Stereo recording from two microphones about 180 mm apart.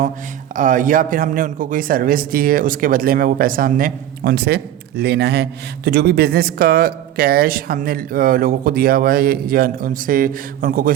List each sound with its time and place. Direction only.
0.5 s a man's voice: 45° right (ahead or behind)